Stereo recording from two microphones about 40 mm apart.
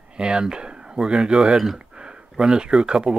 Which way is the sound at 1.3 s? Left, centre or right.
Centre.